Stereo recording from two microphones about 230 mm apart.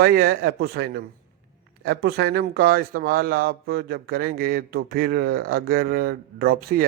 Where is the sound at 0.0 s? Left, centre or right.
Right.